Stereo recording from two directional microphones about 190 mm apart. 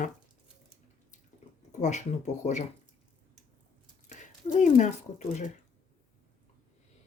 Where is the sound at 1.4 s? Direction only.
35° left (ahead or behind).